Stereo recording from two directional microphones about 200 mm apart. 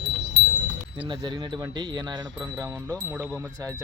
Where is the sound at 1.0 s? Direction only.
25° right (ahead or behind).